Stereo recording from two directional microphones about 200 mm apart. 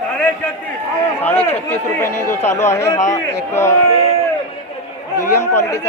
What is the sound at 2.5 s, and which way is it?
A man's voice, 15° left (ahead or behind).